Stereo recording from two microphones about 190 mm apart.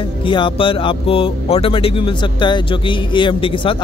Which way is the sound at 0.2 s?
25° left (ahead or behind).